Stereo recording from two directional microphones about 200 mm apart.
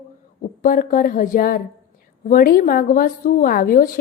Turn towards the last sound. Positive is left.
turn(degrees=45)  # may be behind; listen again after turning